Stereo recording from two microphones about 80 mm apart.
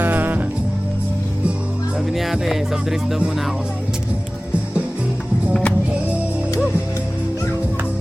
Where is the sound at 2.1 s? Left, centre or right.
Centre.